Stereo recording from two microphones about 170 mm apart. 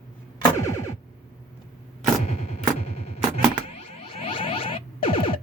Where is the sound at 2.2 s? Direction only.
35° left (ahead or behind).